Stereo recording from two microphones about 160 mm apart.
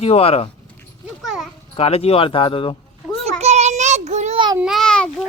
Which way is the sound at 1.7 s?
40° left (ahead or behind).